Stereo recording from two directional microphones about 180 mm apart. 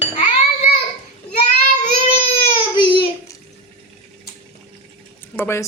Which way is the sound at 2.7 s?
25° left (ahead or behind).